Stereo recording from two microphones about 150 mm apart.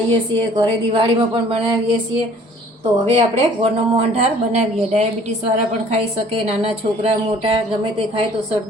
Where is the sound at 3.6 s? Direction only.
45° right (ahead or behind).